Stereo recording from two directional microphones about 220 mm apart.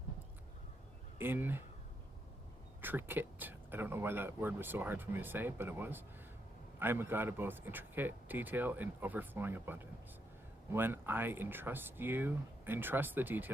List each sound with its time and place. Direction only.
1.2 s speech: 10° right (ahead or behind)
2.8 s speech: 10° right (ahead or behind)